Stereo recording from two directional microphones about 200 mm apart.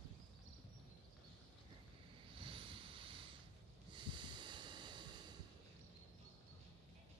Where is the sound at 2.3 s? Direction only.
25° right (ahead or behind).